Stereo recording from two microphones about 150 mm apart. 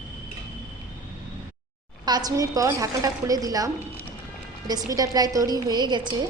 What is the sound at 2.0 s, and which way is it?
A woman's voice, 25° right (ahead or behind).